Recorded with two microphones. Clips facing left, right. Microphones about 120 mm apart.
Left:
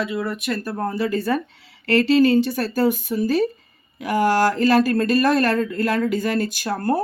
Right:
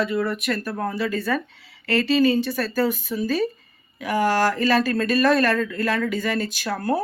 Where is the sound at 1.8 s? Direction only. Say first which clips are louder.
Left 3 dB; 50° left (ahead or behind).